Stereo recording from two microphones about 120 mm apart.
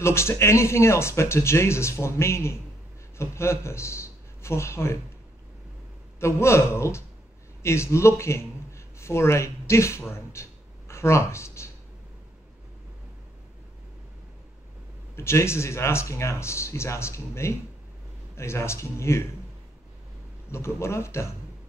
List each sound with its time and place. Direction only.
0.0 s a man's voice: 20° left (ahead or behind)
6.1 s a man's voice: 20° left (ahead or behind)
15.1 s speech: 20° left (ahead or behind)
20.5 s speech: 20° left (ahead or behind)